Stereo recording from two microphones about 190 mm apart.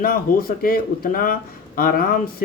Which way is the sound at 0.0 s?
50° left (ahead or behind).